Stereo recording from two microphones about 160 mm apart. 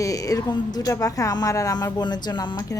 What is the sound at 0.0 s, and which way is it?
A woman's voice, 20° left (ahead or behind).